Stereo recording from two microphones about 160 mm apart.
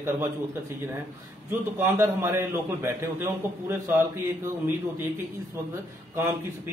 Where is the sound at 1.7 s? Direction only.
15° right (ahead or behind).